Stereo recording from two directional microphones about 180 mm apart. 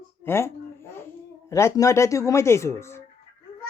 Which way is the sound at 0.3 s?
15° left (ahead or behind).